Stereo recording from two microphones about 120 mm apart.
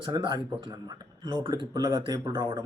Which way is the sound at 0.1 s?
40° right (ahead or behind).